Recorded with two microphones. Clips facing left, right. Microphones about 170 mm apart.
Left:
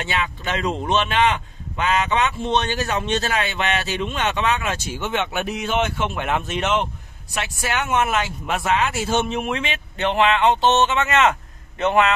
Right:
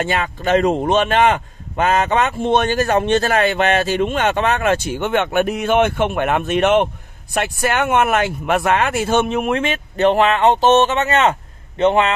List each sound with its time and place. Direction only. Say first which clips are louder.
0.0 s a man's voice: right 6 dB; 45° right (ahead or behind); by 12.1 s 30° right (ahead or behind)